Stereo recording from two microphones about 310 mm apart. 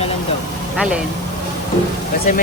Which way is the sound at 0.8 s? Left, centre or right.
Centre.